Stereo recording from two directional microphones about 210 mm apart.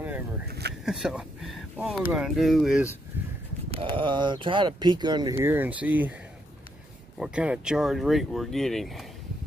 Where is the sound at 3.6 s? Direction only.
25° right (ahead or behind); by 6.2 s 5° right (ahead or behind).